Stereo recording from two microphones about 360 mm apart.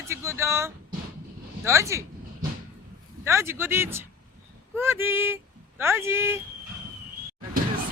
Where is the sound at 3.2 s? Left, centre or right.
Centre.